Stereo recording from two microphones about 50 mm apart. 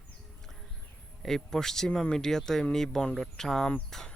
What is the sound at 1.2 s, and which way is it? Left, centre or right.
Speech, centre.